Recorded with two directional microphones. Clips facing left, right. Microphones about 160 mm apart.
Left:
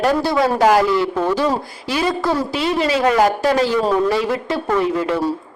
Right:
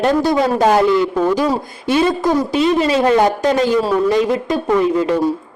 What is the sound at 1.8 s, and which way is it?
A man's voice, 25° right (ahead or behind).